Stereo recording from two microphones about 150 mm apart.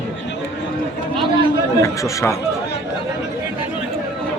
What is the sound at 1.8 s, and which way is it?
Speech, 20° left (ahead or behind).